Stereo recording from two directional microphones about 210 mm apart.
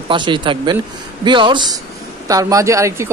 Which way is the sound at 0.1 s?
20° right (ahead or behind).